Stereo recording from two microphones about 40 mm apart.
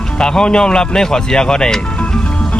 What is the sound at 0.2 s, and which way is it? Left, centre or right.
Speech, centre.